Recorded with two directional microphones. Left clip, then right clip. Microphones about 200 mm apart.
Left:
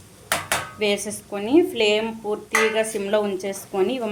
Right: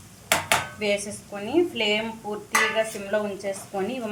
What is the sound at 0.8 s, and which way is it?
Speech, 50° left (ahead or behind).